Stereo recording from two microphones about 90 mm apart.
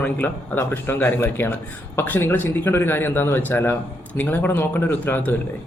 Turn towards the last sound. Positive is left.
turn(degrees=20)  # may be behind; listen again after turning